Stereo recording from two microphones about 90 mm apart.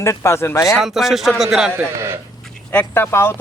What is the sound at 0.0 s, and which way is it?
Speech, 30° left (ahead or behind).